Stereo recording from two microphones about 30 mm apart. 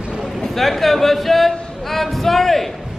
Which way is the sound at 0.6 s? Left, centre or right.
Centre.